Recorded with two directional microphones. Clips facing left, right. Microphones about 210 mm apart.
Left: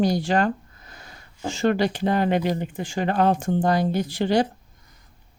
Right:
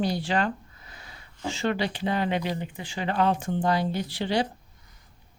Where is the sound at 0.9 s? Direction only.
45° left (ahead or behind).